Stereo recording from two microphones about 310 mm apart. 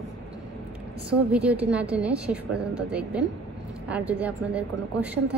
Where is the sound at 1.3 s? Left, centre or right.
Centre.